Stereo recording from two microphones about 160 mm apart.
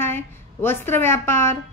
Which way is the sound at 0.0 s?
15° left (ahead or behind).